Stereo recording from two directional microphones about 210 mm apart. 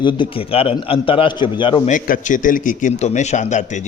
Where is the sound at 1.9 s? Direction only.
40° left (ahead or behind).